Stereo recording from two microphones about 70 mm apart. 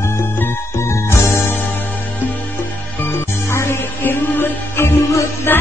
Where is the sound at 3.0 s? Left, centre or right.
Left.